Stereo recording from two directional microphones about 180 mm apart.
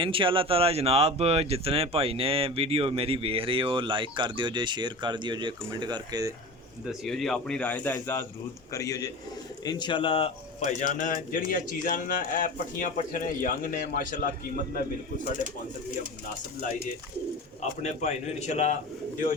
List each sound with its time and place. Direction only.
0.0 s speech: 30° right (ahead or behind)
6.8 s speech: centre (ahead or behind); by 10.3 s 30° left (ahead or behind)
10.6 s speech: 45° left (ahead or behind)
17.8 s a man's voice: 40° left (ahead or behind)